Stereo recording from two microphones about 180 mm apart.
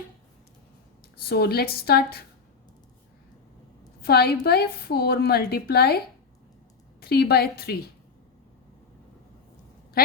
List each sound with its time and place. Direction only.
1.3 s a woman's voice: 60° left (ahead or behind)
4.0 s a woman's voice: 60° left (ahead or behind)
7.0 s a woman's voice: 60° left (ahead or behind)